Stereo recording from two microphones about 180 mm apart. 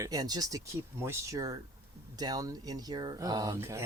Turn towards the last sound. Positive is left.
turn(degrees=-15)  # may be behind; listen again after turning